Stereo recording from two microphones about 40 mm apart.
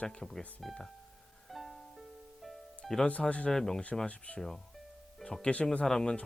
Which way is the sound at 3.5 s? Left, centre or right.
Centre.